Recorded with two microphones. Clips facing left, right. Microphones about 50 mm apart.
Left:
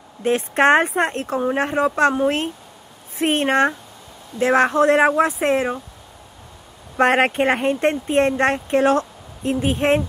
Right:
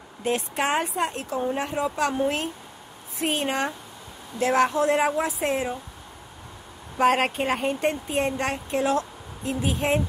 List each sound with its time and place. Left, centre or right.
0.2 s speech: left
0.6 s speech: left
4.4 s speech: left
7.0 s speech: left